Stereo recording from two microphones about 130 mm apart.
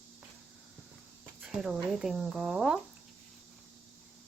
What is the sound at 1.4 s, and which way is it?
Speech, 5° right (ahead or behind).